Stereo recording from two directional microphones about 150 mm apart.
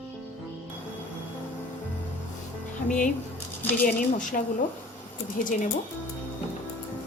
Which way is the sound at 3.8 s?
65° left (ahead or behind).